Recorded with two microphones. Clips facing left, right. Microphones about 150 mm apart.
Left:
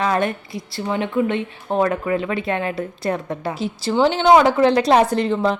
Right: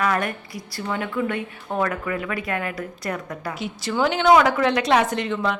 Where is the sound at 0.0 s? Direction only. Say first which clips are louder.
Left 3 dB; 25° left (ahead or behind).